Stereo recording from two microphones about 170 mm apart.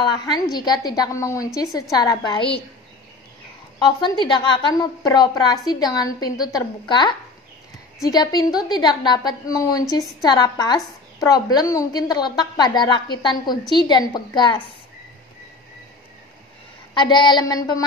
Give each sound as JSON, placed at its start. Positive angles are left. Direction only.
{"t": 0.0, "sound": "a woman's voice", "side_deg": 25}
{"t": 3.8, "sound": "a woman's voice", "side_deg": 25}
{"t": 16.9, "sound": "a woman's voice", "side_deg": 25}